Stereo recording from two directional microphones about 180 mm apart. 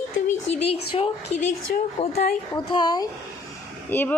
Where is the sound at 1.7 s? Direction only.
60° left (ahead or behind).